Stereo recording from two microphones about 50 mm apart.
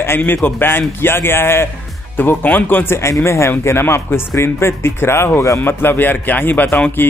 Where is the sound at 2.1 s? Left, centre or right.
Left.